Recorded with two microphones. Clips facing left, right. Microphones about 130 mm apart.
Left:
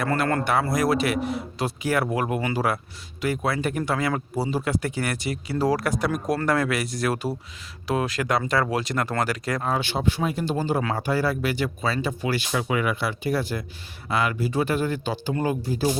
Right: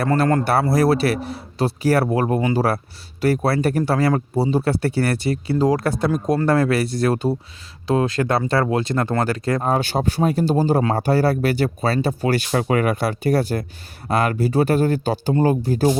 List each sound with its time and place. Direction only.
0.0 s a man's voice: 35° right (ahead or behind)
9.6 s a man's voice: 45° right (ahead or behind)